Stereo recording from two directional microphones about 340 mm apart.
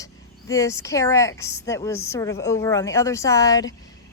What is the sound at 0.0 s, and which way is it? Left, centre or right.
Speech, centre.